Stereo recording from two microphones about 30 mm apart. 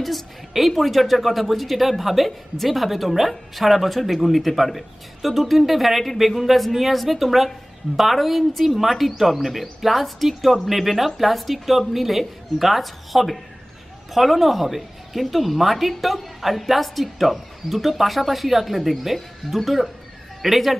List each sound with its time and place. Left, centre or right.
0.5 s speech: centre